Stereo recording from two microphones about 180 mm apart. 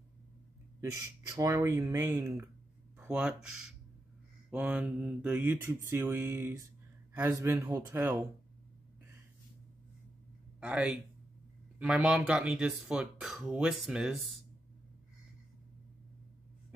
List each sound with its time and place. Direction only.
0.7 s mantra: 15° right (ahead or behind)
3.0 s speech: 5° right (ahead or behind)
4.5 s mantra: 5° right (ahead or behind)
10.6 s mantra: 10° right (ahead or behind)
11.8 s speech: 5° right (ahead or behind)